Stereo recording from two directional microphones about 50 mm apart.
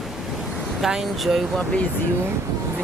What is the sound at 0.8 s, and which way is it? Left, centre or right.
Speech, centre.